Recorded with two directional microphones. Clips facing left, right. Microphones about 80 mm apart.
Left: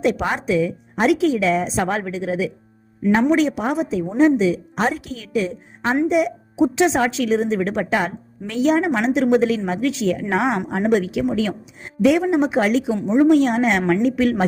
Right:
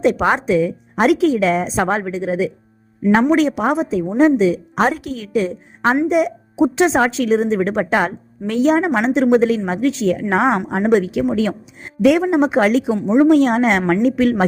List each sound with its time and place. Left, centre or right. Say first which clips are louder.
0.0 s a woman's voice: right 5 dB; right
2.0 s a woman's voice: right 3 dB; right
3.2 s a woman's voice: right 3 dB; right
13.1 s a woman's voice: right 2 dB; right